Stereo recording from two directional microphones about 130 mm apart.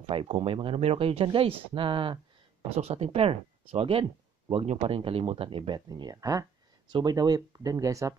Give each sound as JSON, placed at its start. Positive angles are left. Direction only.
{"t": 0.1, "sound": "speech", "side_deg": -45}
{"t": 2.8, "sound": "speech", "side_deg": -55}
{"t": 5.9, "sound": "speech", "side_deg": -30}